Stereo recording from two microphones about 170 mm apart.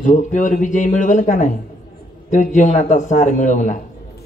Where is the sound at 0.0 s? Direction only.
45° left (ahead or behind).